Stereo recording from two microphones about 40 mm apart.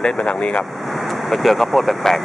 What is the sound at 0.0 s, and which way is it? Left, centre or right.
Speech, left.